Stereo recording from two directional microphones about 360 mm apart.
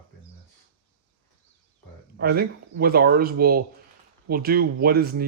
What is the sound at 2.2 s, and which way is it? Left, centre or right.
Speech, right.